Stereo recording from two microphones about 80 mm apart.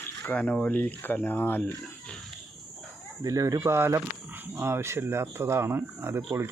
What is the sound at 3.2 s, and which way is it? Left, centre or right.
Speech, right.